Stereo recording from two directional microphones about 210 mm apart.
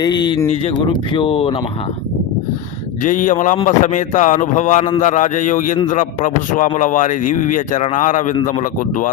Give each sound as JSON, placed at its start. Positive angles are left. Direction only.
{"t": 0.0, "sound": "speech", "side_deg": 20}
{"t": 3.0, "sound": "a man's voice", "side_deg": 40}